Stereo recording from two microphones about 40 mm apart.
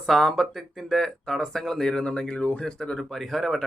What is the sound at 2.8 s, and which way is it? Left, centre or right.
Speech, centre.